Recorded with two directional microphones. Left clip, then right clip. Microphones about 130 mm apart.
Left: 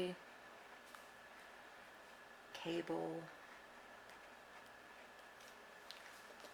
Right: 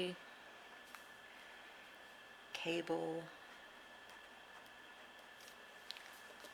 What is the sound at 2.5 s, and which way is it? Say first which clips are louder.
Speech: right 3 dB; 20° right (ahead or behind).